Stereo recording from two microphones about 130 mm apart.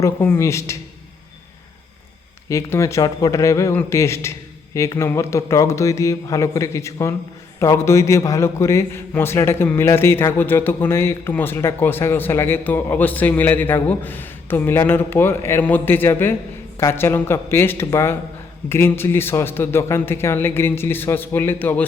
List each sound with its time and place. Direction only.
0.0 s speech: 20° left (ahead or behind)
2.5 s a man's voice: 20° left (ahead or behind)